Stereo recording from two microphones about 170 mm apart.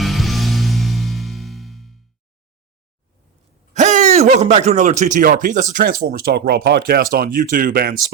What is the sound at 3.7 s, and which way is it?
Speech, 45° right (ahead or behind).